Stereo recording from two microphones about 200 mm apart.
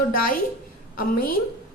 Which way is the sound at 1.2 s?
45° left (ahead or behind).